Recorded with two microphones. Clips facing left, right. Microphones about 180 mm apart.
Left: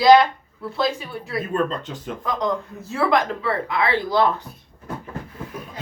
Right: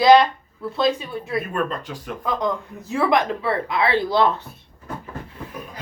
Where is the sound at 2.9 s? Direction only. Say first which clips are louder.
Right 1 dB; 20° right (ahead or behind).